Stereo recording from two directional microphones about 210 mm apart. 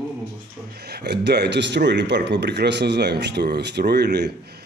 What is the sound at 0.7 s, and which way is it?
Speech, 50° right (ahead or behind).